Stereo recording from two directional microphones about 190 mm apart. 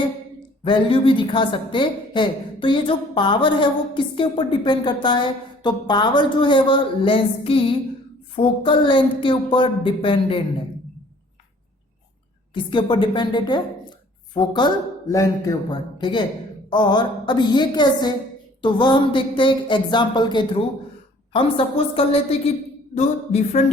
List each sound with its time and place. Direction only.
0.6 s a woman's voice: 25° left (ahead or behind)
12.5 s a woman's voice: 25° left (ahead or behind)